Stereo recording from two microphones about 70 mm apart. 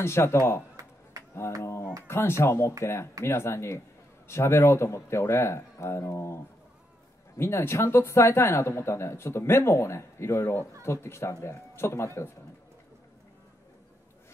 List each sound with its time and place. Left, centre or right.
0.0 s speech: left
1.6 s a sound: left
2.0 s speech: left